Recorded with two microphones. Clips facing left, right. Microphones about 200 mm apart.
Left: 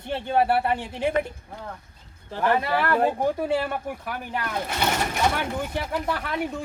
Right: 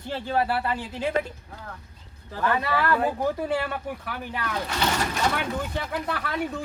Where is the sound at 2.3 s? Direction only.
25° left (ahead or behind).